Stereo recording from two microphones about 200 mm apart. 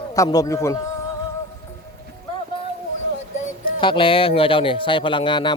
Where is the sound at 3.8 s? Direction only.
25° left (ahead or behind).